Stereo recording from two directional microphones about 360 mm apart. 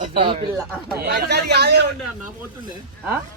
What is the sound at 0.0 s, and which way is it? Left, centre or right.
Speech, centre.